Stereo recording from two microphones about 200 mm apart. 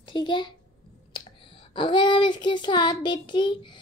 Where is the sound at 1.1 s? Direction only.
25° left (ahead or behind).